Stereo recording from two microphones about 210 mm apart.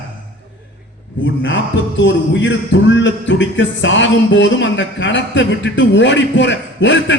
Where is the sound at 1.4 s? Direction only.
60° left (ahead or behind).